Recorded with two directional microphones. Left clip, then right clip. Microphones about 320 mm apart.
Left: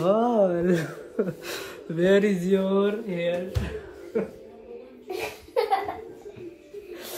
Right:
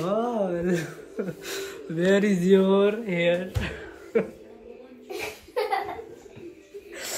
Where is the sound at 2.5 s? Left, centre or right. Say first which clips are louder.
Right 3 dB; right.